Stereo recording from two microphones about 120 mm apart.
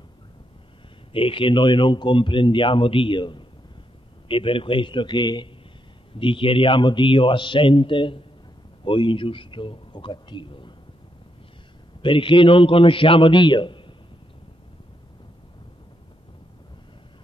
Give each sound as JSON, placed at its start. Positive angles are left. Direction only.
{"t": 1.1, "sound": "speech", "side_deg": 45}
{"t": 12.0, "sound": "speech", "side_deg": 45}